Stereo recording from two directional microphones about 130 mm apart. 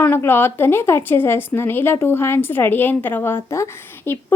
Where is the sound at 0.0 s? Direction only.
15° left (ahead or behind).